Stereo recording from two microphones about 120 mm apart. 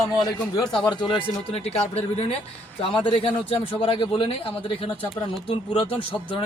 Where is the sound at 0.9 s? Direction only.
40° left (ahead or behind).